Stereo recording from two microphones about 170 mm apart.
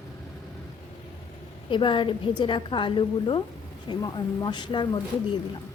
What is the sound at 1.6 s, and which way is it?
A woman's voice, 30° left (ahead or behind).